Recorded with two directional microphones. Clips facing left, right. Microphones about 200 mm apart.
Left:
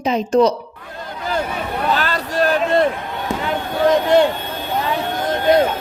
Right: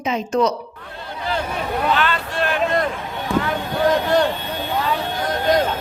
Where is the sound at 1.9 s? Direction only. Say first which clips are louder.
Left 1 dB; 40° left (ahead or behind).